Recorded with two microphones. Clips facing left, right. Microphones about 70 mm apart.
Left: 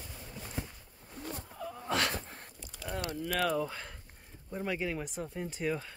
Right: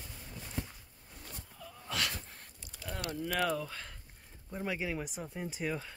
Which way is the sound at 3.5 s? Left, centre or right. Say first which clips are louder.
Left 4 dB; centre.